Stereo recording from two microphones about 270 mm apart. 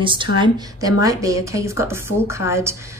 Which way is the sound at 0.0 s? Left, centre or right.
Centre.